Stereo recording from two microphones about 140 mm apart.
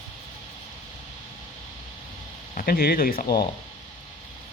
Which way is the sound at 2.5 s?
90° left.